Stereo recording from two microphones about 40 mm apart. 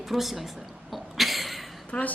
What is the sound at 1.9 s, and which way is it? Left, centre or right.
Speech, left.